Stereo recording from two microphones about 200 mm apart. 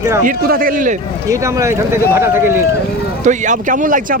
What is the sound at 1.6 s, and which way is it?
Speech, 15° right (ahead or behind).